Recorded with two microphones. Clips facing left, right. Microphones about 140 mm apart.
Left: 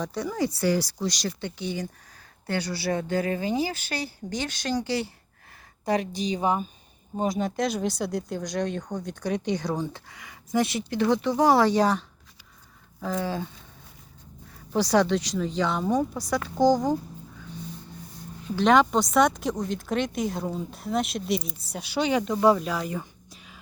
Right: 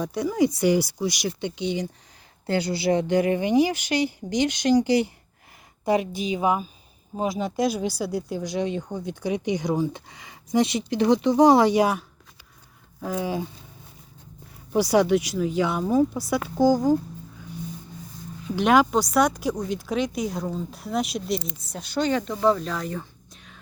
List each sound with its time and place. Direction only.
0.0 s a woman's voice: 10° right (ahead or behind)
10.1 s speech: 25° right (ahead or behind)
14.7 s speech: 10° right (ahead or behind)
18.5 s speech: 10° right (ahead or behind)